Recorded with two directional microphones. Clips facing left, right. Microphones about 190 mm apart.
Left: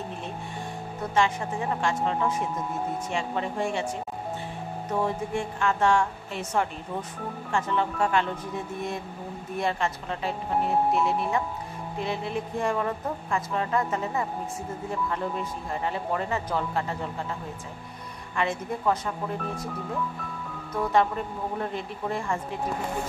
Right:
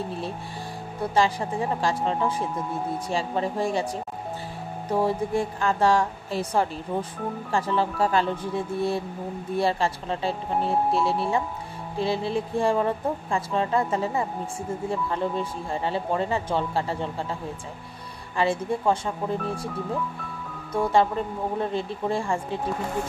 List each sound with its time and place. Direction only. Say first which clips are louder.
1.1 s speech: right 2 dB; 35° right (ahead or behind)
5.0 s speech: right 4 dB; 35° right (ahead or behind)
20.7 s speech: right 2 dB; 30° right (ahead or behind)